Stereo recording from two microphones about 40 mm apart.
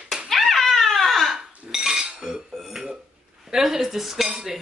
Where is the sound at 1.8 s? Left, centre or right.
Centre.